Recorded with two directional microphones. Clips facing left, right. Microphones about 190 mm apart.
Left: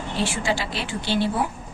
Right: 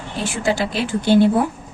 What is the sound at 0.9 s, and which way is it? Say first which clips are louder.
Speech: right 10 dB; 50° right (ahead or behind).